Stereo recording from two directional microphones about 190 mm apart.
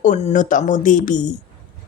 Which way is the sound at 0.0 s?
35° left (ahead or behind).